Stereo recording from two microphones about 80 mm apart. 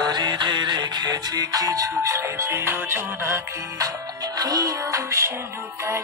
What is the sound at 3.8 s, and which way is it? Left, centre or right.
Music, right.